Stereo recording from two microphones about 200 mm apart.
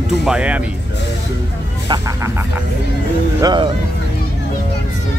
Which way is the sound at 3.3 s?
20° right (ahead or behind).